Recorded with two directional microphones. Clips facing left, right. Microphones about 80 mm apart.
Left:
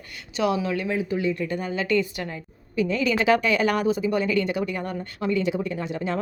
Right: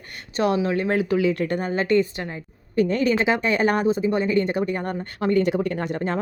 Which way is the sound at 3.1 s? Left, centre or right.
Right.